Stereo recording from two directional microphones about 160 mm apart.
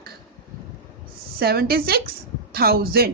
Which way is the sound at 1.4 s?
75° right (ahead or behind).